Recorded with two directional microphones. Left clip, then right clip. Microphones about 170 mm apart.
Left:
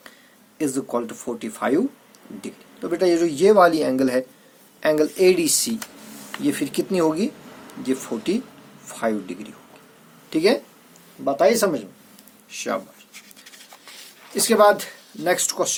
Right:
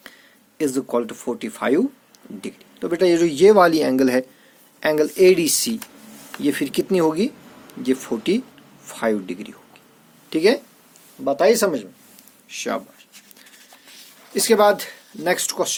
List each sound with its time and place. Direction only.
0.6 s speech: 55° right (ahead or behind)
14.3 s speech: 55° right (ahead or behind)